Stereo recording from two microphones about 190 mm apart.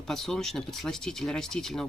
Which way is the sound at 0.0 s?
Centre (ahead or behind).